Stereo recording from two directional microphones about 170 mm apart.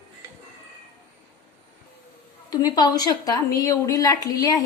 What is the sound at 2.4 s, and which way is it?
Speech, 25° left (ahead or behind).